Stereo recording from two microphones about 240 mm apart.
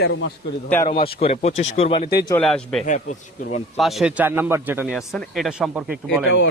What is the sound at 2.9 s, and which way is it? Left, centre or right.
Speech, left.